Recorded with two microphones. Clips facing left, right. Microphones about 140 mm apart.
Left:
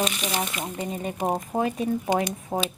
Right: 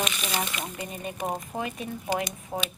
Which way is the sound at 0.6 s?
30° left (ahead or behind).